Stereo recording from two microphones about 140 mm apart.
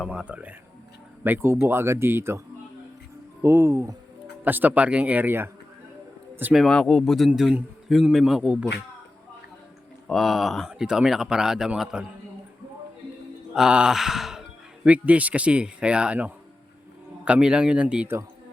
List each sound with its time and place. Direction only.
0.1 s speech: 10° right (ahead or behind)
3.4 s speech: 15° right (ahead or behind)
6.4 s speech: centre (ahead or behind)
10.1 s speech: centre (ahead or behind)
13.5 s music: 5° right (ahead or behind)
14.8 s speech: 10° right (ahead or behind)